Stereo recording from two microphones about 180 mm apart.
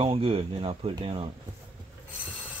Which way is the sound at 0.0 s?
30° right (ahead or behind).